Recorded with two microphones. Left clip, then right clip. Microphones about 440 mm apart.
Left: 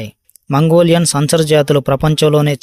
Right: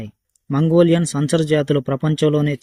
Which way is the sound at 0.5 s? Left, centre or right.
Left.